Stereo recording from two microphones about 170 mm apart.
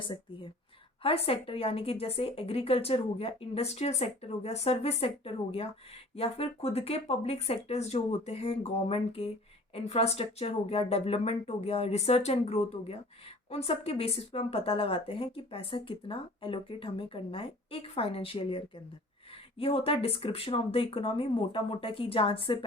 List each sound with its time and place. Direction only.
0.0 s speech: 30° left (ahead or behind)